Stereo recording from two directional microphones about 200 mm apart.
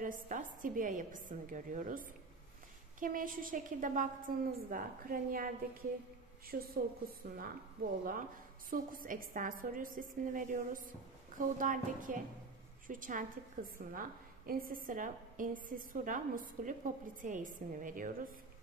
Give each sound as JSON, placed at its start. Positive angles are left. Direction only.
{"t": 0.0, "sound": "a woman's voice", "side_deg": -40}